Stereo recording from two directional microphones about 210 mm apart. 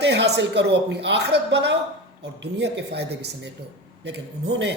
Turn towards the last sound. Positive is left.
turn(degrees=-55)  # may be behind; listen again after turning